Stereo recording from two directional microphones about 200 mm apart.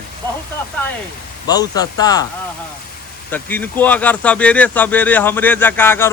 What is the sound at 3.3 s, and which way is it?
Speech, 10° left (ahead or behind).